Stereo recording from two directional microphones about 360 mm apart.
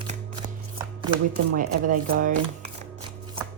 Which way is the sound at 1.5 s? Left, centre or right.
Right.